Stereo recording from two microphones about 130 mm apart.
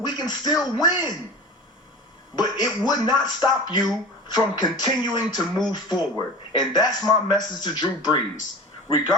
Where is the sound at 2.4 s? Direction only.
30° left (ahead or behind).